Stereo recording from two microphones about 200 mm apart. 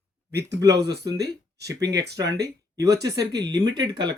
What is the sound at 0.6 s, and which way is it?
Speech, 15° right (ahead or behind).